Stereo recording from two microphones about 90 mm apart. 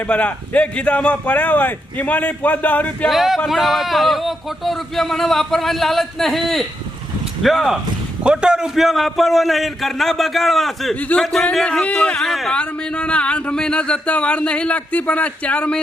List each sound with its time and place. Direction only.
0.1 s speech: 15° left (ahead or behind)
3.1 s speech: centre (ahead or behind)
8.2 s speech: 10° right (ahead or behind); by 15.8 s 15° left (ahead or behind)